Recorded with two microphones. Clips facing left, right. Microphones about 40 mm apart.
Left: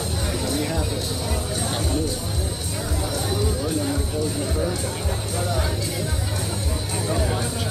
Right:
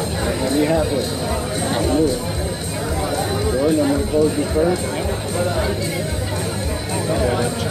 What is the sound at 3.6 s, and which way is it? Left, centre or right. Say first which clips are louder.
Speech: right 8 dB; right.